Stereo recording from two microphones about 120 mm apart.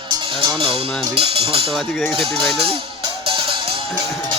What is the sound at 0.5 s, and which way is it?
Speech, 50° right (ahead or behind).